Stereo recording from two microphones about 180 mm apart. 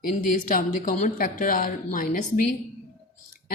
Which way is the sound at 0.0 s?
50° left (ahead or behind).